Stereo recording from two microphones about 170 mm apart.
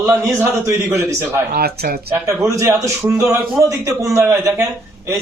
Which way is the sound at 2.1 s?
15° right (ahead or behind).